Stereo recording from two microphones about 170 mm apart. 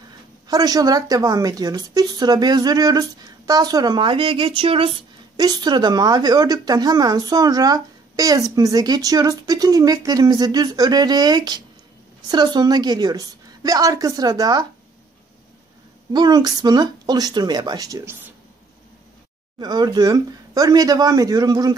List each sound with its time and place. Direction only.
0.5 s a woman's voice: 20° right (ahead or behind)
16.1 s a woman's voice: 25° right (ahead or behind)
19.6 s a woman's voice: 25° right (ahead or behind)